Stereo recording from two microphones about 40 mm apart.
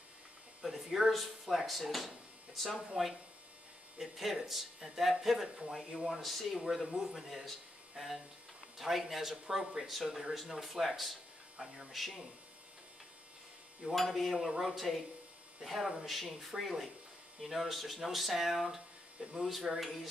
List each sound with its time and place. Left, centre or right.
0.6 s speech: centre
4.0 s speech: centre
13.9 s speech: centre